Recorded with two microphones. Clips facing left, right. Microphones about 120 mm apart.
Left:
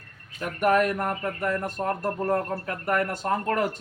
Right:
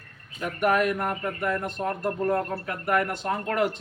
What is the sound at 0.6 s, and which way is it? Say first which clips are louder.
Speech: left 1 dB; 40° left (ahead or behind).